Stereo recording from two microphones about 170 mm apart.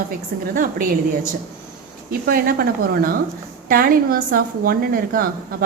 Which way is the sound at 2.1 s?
55° right (ahead or behind).